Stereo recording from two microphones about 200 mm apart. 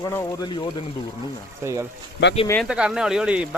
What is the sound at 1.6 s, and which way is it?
A man's voice, 15° right (ahead or behind).